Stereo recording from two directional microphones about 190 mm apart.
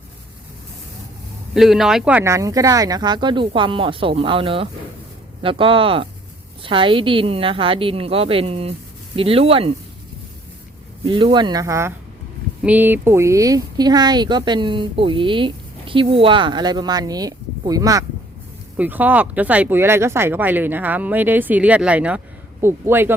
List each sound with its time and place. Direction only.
1.5 s speech: centre (ahead or behind); by 9.7 s 30° right (ahead or behind)
11.0 s speech: 25° right (ahead or behind)